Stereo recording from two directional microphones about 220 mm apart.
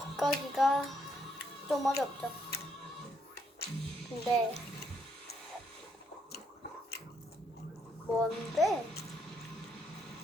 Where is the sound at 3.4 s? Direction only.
45° left (ahead or behind).